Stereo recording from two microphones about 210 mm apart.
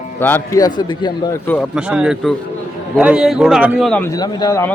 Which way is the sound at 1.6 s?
5° right (ahead or behind).